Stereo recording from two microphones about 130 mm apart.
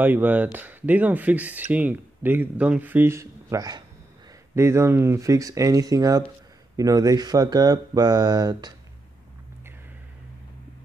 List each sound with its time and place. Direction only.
0.0 s speech: 15° right (ahead or behind); by 8.7 s 30° right (ahead or behind)